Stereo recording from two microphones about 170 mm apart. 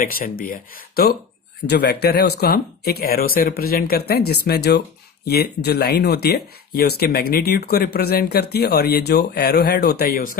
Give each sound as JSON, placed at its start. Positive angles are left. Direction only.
{"t": 0.0, "sound": "speech", "side_deg": 55}
{"t": 1.6, "sound": "speech", "side_deg": 75}